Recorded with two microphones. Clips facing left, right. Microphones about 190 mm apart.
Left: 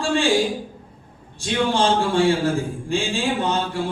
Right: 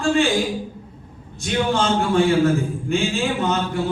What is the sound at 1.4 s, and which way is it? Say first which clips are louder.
A man's voice: even; 30° left (ahead or behind).